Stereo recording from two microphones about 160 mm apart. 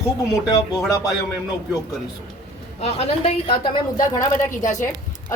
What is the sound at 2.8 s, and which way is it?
Speech, 40° left (ahead or behind).